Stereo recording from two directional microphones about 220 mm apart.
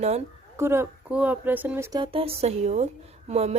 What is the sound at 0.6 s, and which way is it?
Speech, 10° right (ahead or behind).